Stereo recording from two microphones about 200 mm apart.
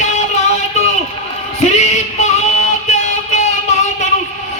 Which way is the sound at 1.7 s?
35° left (ahead or behind).